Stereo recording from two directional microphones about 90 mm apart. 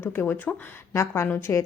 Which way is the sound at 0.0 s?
25° left (ahead or behind).